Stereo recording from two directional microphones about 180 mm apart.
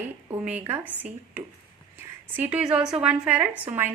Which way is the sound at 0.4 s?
10° right (ahead or behind).